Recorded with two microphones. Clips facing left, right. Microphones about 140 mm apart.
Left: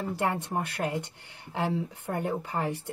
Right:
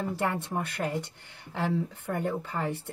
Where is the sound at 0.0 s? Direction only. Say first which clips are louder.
Left 1 dB; 15° left (ahead or behind).